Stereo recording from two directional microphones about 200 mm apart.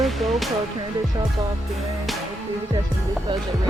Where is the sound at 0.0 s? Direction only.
Centre (ahead or behind).